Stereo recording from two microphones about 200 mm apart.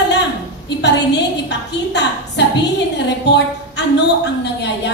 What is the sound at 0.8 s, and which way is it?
A woman's voice, 60° left (ahead or behind).